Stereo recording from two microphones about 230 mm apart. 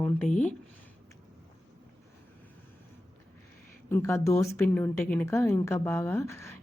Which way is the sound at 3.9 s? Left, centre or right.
Centre.